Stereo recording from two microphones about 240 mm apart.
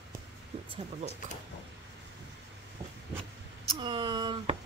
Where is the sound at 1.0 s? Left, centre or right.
Right.